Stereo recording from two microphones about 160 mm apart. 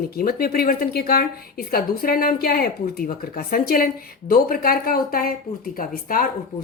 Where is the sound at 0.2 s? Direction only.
70° left (ahead or behind).